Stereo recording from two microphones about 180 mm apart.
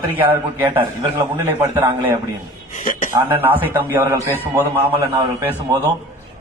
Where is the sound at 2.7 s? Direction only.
50° left (ahead or behind).